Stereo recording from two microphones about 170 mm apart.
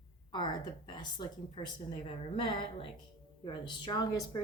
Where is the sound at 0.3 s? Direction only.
25° left (ahead or behind).